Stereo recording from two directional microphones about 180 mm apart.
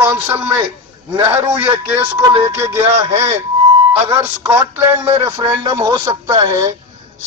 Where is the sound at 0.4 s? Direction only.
10° right (ahead or behind).